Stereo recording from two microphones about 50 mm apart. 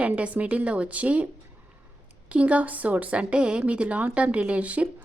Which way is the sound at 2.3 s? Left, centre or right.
Right.